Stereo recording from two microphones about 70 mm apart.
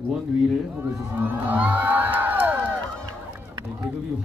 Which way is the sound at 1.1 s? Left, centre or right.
Right.